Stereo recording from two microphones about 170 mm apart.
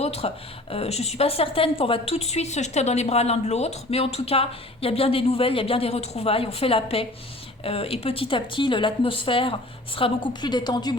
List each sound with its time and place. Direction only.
0.0 s a woman's voice: 35° left (ahead or behind)